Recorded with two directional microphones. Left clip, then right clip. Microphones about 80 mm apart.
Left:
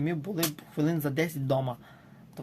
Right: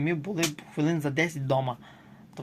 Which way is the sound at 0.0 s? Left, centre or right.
Left.